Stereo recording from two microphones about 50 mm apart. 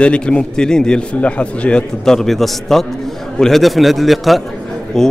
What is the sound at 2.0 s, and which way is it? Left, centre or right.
A man's voice, centre.